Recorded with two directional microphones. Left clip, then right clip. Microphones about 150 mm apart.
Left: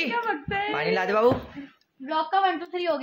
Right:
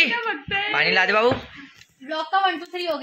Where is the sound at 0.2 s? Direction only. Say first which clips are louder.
Right 2 dB; 90° left.